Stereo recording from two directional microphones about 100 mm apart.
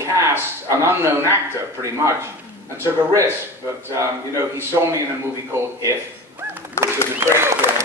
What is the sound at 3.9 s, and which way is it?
Speech, 30° right (ahead or behind).